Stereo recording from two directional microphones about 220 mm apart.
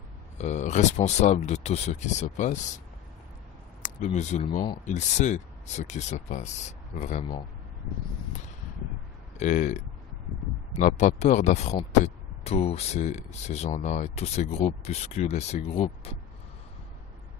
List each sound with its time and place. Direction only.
0.3 s speech: 30° left (ahead or behind)
3.8 s speech: 35° left (ahead or behind)
9.4 s speech: 35° left (ahead or behind)